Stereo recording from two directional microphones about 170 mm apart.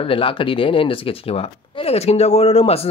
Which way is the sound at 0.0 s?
30° left (ahead or behind).